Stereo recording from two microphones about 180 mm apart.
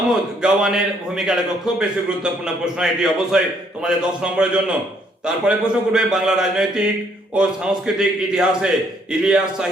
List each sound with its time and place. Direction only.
0.1 s a man's voice: 5° right (ahead or behind)